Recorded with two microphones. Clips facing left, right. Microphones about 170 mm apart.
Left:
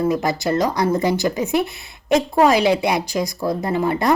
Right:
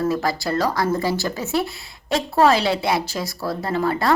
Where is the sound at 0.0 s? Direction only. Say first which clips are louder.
Left 2 dB; 20° left (ahead or behind).